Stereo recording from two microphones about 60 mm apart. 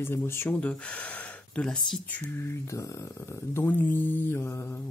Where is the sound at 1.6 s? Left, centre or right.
Centre.